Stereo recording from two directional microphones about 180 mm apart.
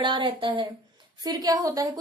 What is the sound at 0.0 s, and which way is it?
A woman's voice, 25° right (ahead or behind).